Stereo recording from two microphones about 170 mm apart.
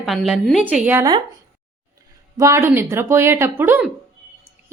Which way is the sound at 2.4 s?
20° right (ahead or behind).